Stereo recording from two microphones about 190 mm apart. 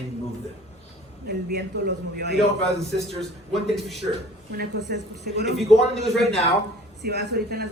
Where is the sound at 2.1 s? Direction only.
60° right (ahead or behind).